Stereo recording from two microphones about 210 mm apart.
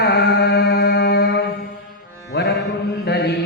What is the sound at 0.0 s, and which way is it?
Chant, 50° left (ahead or behind).